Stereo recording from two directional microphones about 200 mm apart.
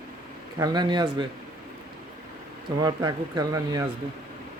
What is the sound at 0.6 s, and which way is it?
Speech, 20° right (ahead or behind).